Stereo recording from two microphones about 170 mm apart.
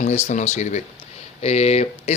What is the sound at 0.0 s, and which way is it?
Speech, 40° left (ahead or behind).